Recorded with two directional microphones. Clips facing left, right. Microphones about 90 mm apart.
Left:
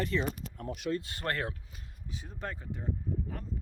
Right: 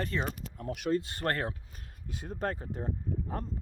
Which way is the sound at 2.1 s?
50° right (ahead or behind).